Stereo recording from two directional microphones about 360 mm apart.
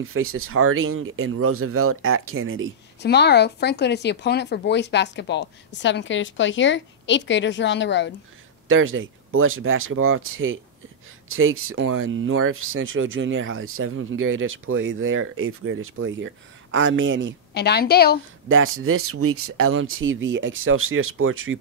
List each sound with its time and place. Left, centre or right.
0.0 s speech: right
3.0 s speech: left
8.6 s speech: right
17.6 s speech: left
18.5 s speech: right